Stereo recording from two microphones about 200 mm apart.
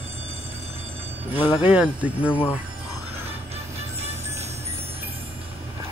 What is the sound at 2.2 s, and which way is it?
Speech, 10° left (ahead or behind).